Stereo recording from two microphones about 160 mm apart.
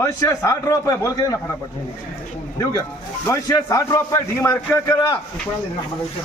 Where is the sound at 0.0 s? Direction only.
20° left (ahead or behind).